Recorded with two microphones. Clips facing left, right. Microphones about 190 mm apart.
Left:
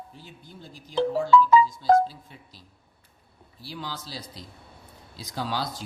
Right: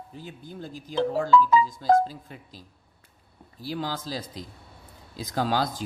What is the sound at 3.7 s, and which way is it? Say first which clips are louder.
Speech: right 6 dB; 45° right (ahead or behind).